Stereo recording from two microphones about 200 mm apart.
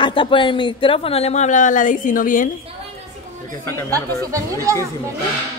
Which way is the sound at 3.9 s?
15° right (ahead or behind).